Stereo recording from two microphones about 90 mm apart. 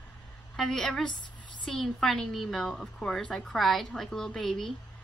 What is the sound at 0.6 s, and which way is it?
Speech, 5° left (ahead or behind).